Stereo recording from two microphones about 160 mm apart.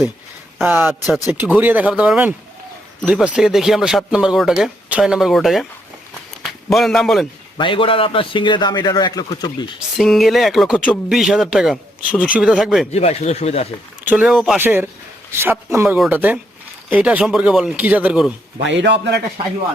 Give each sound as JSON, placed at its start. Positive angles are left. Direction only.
{"t": 0.6, "sound": "a man's voice", "side_deg": -10}
{"t": 7.6, "sound": "a man's voice", "side_deg": 30}
{"t": 10.0, "sound": "speech", "side_deg": 0}
{"t": 12.9, "sound": "speech", "side_deg": 40}
{"t": 14.0, "sound": "speech", "side_deg": -10}
{"t": 14.6, "sound": "speech", "side_deg": -15}
{"t": 18.6, "sound": "a man's voice", "side_deg": -90}